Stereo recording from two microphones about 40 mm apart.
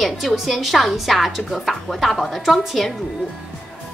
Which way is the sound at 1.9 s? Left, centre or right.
Centre.